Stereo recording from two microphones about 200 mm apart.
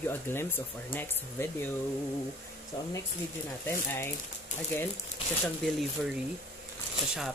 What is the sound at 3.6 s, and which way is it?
Speech, 10° left (ahead or behind).